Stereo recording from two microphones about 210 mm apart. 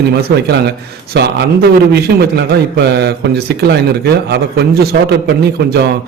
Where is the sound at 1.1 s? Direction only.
50° right (ahead or behind).